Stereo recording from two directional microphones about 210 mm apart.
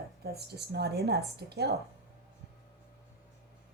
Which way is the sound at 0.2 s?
50° right (ahead or behind).